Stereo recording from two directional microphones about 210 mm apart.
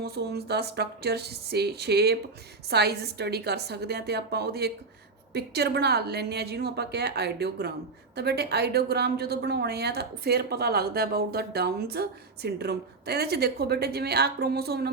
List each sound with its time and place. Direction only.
0.0 s a woman's voice: 50° right (ahead or behind)